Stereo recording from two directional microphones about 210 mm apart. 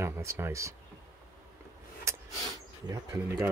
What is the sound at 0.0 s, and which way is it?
Speech, 15° right (ahead or behind).